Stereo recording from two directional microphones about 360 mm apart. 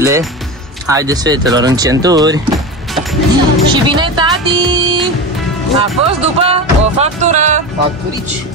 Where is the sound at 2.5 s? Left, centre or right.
Centre.